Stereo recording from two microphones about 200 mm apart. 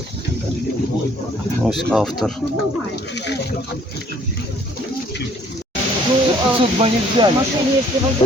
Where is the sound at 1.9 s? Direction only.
5° left (ahead or behind).